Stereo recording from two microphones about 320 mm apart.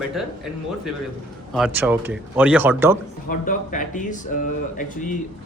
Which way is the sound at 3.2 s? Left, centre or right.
Left.